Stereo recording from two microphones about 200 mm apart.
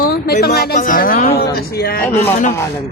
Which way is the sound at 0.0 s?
50° left (ahead or behind).